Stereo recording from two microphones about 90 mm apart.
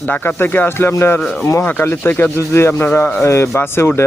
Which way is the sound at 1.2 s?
10° left (ahead or behind).